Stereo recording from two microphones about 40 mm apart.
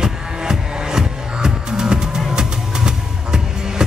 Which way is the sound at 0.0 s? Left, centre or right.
Centre.